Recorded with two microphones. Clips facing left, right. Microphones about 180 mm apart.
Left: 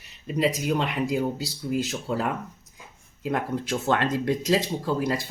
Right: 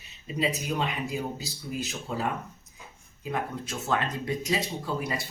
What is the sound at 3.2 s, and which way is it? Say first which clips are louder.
Speech: left 5 dB; 75° left (ahead or behind).